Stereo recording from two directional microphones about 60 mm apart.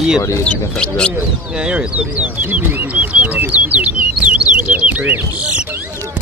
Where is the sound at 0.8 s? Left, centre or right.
Centre.